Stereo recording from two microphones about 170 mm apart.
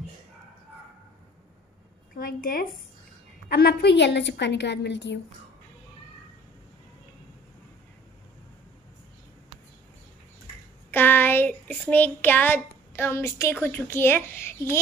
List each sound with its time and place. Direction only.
2.1 s a woman's voice: 60° left (ahead or behind)
3.4 s a woman's voice: 70° left (ahead or behind); by 5.2 s 90° left
10.9 s speech: 10° left (ahead or behind)